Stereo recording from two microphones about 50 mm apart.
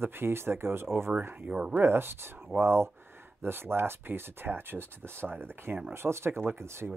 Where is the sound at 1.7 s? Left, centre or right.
Right.